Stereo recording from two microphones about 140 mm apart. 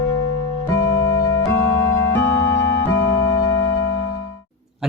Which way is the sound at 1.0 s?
25° left (ahead or behind).